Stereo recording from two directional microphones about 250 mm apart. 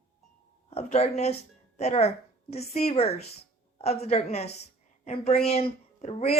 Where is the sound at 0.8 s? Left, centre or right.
Left.